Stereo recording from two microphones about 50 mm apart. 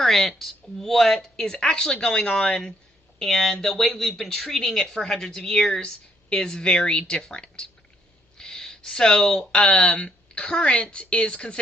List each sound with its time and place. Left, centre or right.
0.0 s speech: centre
3.2 s speech: centre